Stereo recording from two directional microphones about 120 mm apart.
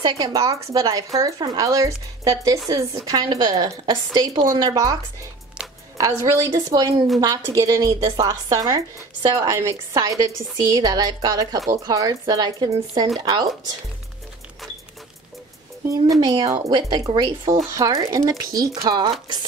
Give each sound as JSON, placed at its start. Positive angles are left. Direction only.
{"t": 0.0, "sound": "a woman's voice", "side_deg": -30}
{"t": 5.6, "sound": "a sound", "side_deg": -5}
{"t": 5.9, "sound": "a woman's voice", "side_deg": -25}
{"t": 15.9, "sound": "a woman's voice", "side_deg": -30}